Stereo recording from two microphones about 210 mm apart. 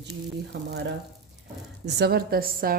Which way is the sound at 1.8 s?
50° right (ahead or behind).